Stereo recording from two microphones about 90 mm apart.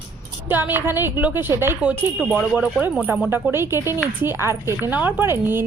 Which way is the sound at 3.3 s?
25° right (ahead or behind).